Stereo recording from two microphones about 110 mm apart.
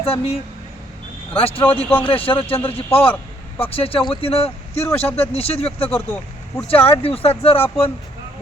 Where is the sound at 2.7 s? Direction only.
60° left (ahead or behind).